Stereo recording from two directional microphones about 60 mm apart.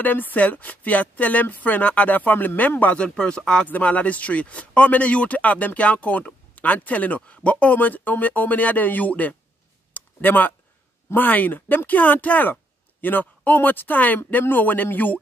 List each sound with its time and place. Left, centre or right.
0.0 s speech: left
3.0 s speech: centre
3.6 s speech: left
9.9 s a sound: left
11.1 s a man's voice: left